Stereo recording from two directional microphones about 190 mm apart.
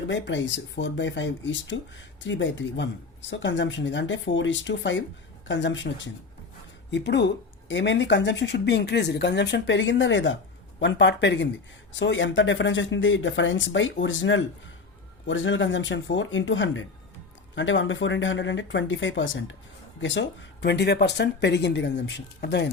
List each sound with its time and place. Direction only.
0.1 s speech: 70° left (ahead or behind)
6.9 s speech: 65° left (ahead or behind)